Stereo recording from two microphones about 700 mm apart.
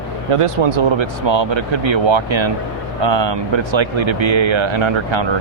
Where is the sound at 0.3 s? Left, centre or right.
Right.